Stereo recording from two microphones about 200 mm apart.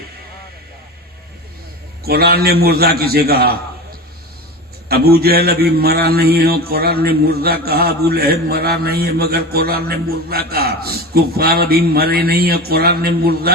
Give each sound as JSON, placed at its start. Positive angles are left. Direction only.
{"t": 2.0, "sound": "speech", "side_deg": -50}
{"t": 4.9, "sound": "speech", "side_deg": -50}